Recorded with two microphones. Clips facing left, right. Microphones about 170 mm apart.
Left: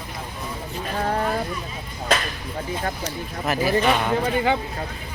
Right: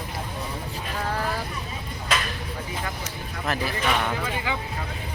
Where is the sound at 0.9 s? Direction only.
35° left (ahead or behind).